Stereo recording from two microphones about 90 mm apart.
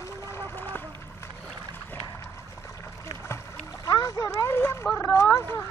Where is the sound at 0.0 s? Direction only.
25° left (ahead or behind).